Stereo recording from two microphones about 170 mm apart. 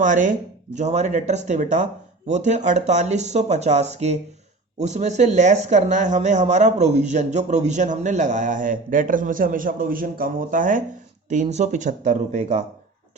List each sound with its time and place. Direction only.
0.0 s speech: 50° right (ahead or behind)